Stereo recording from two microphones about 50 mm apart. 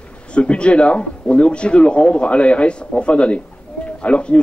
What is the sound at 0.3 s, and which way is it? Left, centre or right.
A man's voice, left.